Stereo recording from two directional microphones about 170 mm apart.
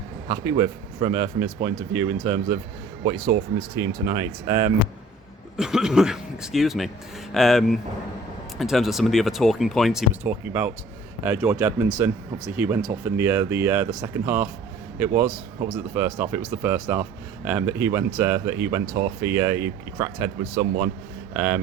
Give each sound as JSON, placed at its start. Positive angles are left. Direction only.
{"t": 0.3, "sound": "speech", "side_deg": -30}
{"t": 5.5, "sound": "a man's voice", "side_deg": -5}